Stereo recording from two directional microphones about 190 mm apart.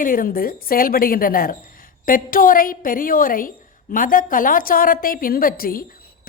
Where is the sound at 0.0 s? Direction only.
45° left (ahead or behind).